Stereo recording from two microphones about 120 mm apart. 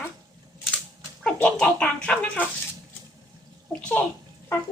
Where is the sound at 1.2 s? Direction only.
10° left (ahead or behind).